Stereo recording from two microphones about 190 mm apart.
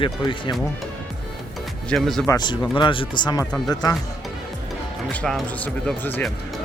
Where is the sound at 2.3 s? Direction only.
20° left (ahead or behind).